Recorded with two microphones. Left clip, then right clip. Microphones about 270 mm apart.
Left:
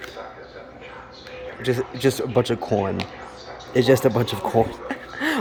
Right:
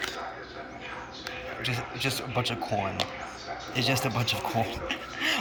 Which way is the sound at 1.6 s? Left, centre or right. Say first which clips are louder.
Left 10 dB; left.